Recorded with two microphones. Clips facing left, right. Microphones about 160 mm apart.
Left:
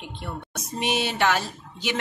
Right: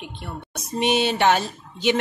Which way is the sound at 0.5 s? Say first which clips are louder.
Right 6 dB; 20° right (ahead or behind).